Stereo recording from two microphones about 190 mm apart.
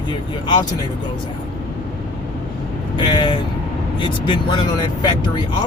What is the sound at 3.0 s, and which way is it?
Speech, 25° left (ahead or behind).